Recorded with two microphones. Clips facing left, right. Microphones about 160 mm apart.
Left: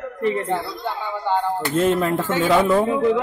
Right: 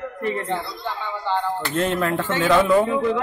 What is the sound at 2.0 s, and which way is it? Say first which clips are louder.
Speech: left 1 dB; 10° left (ahead or behind).